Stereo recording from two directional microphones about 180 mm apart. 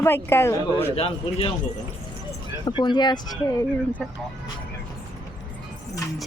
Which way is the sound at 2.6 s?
25° left (ahead or behind).